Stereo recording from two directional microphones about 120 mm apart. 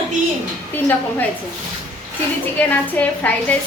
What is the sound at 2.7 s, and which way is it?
Speech, 15° left (ahead or behind).